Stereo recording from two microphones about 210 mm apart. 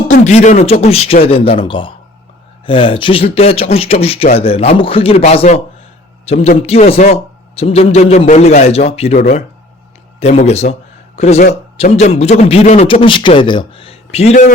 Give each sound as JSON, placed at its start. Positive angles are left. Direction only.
{"t": 0.1, "sound": "speech", "side_deg": 35}
{"t": 10.2, "sound": "a man's voice", "side_deg": 30}